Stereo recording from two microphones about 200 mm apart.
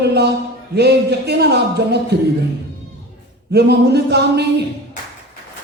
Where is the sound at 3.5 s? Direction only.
55° right (ahead or behind).